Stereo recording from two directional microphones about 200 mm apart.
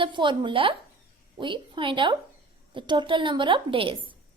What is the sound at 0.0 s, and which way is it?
A woman's voice, 25° right (ahead or behind).